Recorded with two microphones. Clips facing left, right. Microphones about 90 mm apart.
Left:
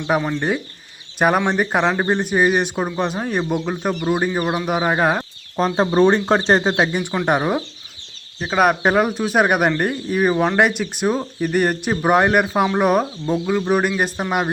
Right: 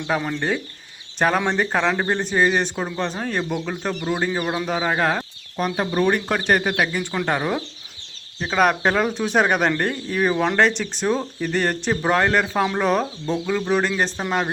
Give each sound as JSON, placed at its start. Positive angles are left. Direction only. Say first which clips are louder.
{"t": 0.3, "sound": "speech", "louder": "left 2 dB", "side_deg": 10}
{"t": 5.5, "sound": "speech", "louder": "left 6 dB", "side_deg": 30}
{"t": 8.4, "sound": "speech", "louder": "left 2 dB", "side_deg": 10}